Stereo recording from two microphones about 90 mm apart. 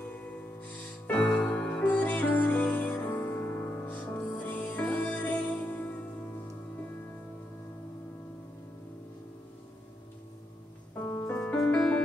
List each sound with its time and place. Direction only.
0.6 s music: 20° left (ahead or behind)
11.0 s music: 25° left (ahead or behind)
11.5 s music: 5° left (ahead or behind)